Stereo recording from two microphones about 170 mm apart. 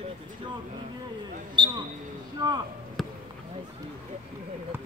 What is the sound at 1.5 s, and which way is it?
Speech, 30° right (ahead or behind).